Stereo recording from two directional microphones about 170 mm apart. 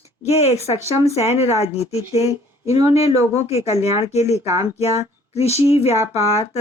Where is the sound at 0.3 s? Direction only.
40° left (ahead or behind).